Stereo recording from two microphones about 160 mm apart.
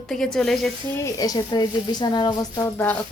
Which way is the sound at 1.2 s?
25° left (ahead or behind).